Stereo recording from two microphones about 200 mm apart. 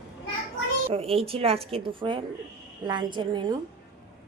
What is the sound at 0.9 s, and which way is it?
Speech, 30° right (ahead or behind).